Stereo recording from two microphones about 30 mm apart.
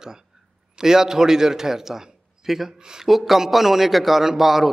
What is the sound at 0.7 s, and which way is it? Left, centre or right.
A man's voice, centre.